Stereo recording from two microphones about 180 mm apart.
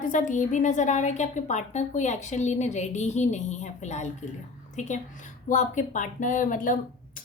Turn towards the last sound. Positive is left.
turn(degrees=50)  # may be behind; listen again after turning